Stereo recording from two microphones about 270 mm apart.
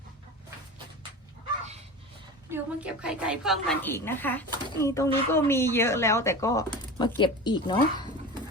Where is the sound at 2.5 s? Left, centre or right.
Centre.